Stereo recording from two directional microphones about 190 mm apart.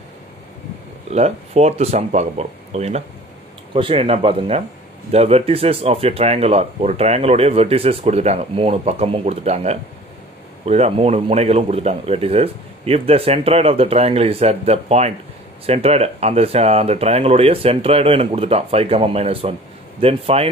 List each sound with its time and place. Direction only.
1.1 s speech: 35° right (ahead or behind)